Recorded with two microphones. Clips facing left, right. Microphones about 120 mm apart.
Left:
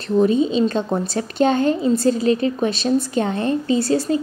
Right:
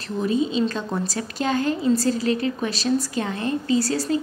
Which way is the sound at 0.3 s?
25° left (ahead or behind).